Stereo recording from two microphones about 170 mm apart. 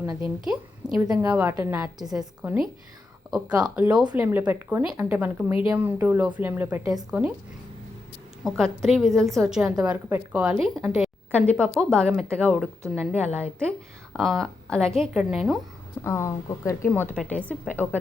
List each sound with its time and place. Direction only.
0.4 s a woman's voice: 5° right (ahead or behind)
8.4 s a woman's voice: centre (ahead or behind)
16.0 s speech: 15° left (ahead or behind)